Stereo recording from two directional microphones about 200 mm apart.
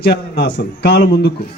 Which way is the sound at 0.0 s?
55° left (ahead or behind).